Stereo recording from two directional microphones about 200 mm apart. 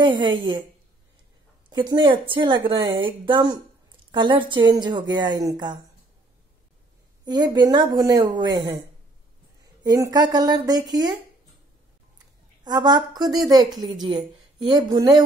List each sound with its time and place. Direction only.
0.2 s a woman's voice: 25° right (ahead or behind)
1.7 s a woman's voice: 20° right (ahead or behind)
7.2 s a woman's voice: 20° right (ahead or behind)
9.8 s a woman's voice: 15° right (ahead or behind)
12.6 s a woman's voice: 20° right (ahead or behind)
13.7 s a woman's voice: centre (ahead or behind)
14.0 s speech: 25° right (ahead or behind)